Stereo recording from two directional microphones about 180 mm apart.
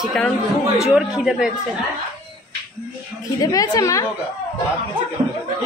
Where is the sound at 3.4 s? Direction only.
20° left (ahead or behind).